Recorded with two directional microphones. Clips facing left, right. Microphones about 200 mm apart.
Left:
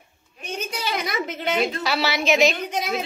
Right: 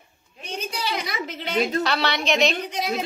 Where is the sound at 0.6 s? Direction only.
50° left (ahead or behind).